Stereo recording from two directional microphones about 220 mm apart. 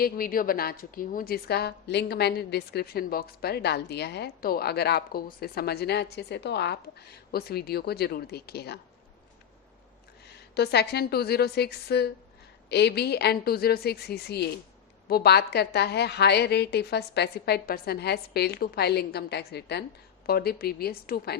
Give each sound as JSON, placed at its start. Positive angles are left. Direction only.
{"t": 0.0, "sound": "a woman's voice", "side_deg": 40}
{"t": 10.2, "sound": "a woman's voice", "side_deg": 50}